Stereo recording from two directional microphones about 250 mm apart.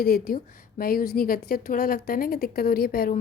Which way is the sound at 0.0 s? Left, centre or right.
Left.